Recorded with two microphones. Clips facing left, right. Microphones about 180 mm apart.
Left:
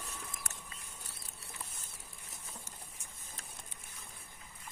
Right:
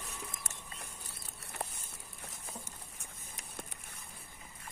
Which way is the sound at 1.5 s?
65° right (ahead or behind).